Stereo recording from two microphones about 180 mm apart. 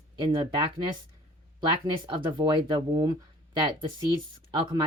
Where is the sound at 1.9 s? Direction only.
25° right (ahead or behind).